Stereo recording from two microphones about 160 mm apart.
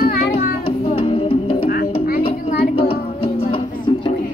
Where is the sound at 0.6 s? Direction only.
35° left (ahead or behind).